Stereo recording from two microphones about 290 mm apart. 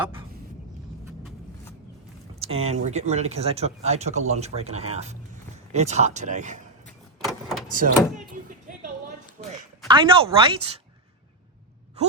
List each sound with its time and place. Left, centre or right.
2.4 s speech: right
6.8 s vehicle: centre
7.7 s speech: right
9.6 s a woman's voice: centre